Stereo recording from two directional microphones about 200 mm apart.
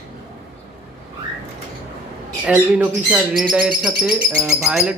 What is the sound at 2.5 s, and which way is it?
Speech, 5° right (ahead or behind).